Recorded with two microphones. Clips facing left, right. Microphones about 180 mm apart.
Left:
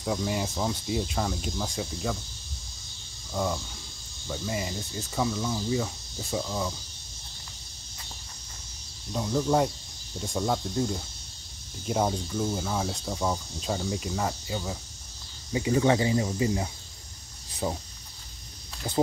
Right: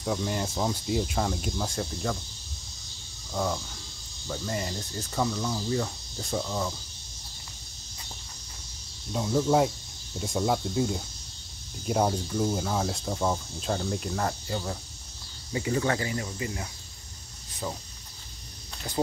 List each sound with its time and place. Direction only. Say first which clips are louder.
0.0 s cricket: even; centre (ahead or behind)
3.3 s cricket: even; centre (ahead or behind)
9.1 s cricket: right 1 dB; centre (ahead or behind)
15.7 s speech: left 5 dB; 15° left (ahead or behind)